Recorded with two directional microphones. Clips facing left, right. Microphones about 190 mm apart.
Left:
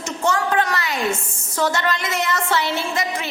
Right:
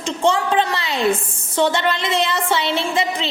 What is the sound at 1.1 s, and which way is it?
Speech, 30° right (ahead or behind).